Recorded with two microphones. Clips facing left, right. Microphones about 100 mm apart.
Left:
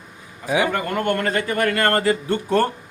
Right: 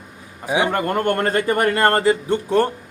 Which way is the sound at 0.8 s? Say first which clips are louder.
Right 2 dB; 45° right (ahead or behind).